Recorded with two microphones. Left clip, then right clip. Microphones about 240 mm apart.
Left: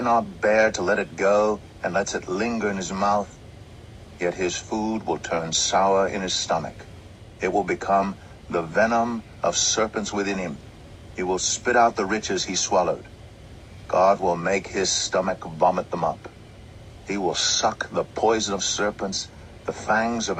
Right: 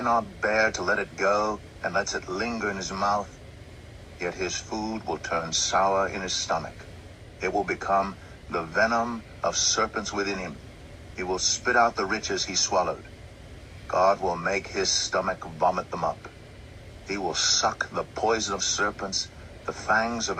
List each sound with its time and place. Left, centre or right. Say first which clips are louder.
0.0 s speech: left 4 dB; left
17.1 s speech: left 2 dB; left